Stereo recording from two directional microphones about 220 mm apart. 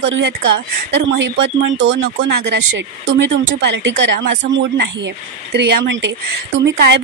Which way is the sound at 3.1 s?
55° right (ahead or behind).